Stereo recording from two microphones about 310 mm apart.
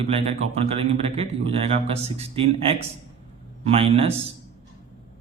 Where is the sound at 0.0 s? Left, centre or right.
Centre.